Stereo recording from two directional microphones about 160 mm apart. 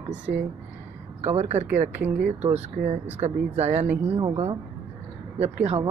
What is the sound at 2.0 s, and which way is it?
Speech, 10° right (ahead or behind).